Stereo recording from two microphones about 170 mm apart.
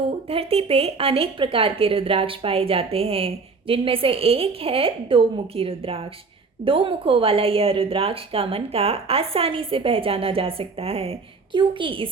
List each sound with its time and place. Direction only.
0.3 s speech: 35° right (ahead or behind)